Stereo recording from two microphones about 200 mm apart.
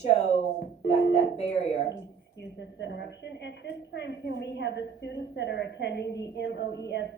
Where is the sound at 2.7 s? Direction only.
60° left (ahead or behind).